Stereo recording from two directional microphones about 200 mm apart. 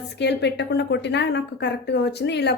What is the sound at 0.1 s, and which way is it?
A woman's voice, 60° left (ahead or behind).